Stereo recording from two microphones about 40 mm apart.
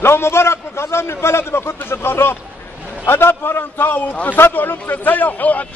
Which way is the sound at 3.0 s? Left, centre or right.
Left.